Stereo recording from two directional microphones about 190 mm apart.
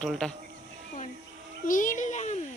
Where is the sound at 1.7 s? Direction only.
45° left (ahead or behind).